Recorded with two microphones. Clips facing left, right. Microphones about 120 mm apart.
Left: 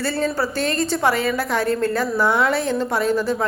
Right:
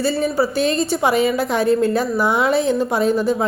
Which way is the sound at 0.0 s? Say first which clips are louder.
Right 4 dB; 15° right (ahead or behind).